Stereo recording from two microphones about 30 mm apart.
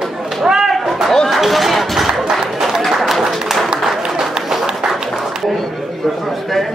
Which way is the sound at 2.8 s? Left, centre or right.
Centre.